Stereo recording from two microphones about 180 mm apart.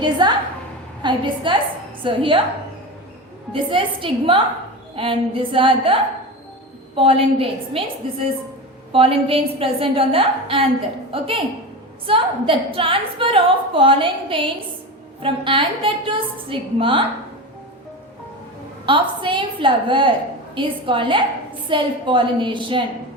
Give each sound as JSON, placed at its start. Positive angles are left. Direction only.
{"t": 0.0, "sound": "a sound", "side_deg": -25}
{"t": 1.0, "sound": "a woman's voice", "side_deg": -25}
{"t": 3.5, "sound": "a woman's voice", "side_deg": -30}
{"t": 18.9, "sound": "a woman's voice", "side_deg": -25}